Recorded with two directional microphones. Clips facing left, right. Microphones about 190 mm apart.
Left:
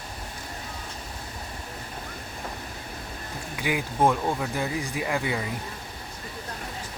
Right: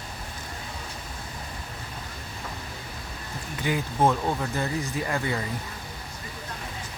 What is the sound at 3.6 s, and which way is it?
Speech, 10° left (ahead or behind).